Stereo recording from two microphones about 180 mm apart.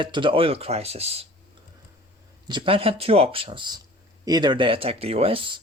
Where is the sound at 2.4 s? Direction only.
25° right (ahead or behind).